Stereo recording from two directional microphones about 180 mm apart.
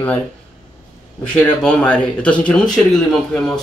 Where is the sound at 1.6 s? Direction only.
5° left (ahead or behind).